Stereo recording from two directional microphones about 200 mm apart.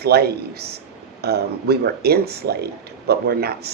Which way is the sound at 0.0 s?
55° right (ahead or behind).